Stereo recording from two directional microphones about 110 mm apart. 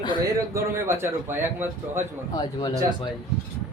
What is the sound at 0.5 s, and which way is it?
A man's voice, 20° right (ahead or behind).